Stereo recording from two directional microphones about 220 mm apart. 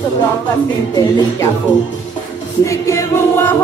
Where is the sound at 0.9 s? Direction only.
15° left (ahead or behind).